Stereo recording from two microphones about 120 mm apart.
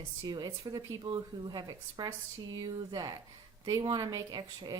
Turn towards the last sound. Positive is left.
turn(degrees=-35)  # may be behind; listen again after turning